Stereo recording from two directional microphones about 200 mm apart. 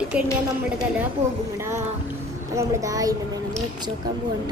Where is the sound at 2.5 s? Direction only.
15° right (ahead or behind).